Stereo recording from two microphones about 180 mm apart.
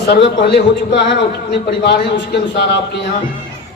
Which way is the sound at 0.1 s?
65° left (ahead or behind).